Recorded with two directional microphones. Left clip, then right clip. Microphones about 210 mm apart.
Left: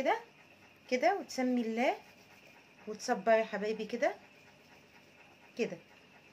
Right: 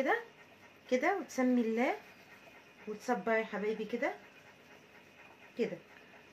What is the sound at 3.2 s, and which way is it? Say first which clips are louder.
Speech: left 7 dB; 15° left (ahead or behind).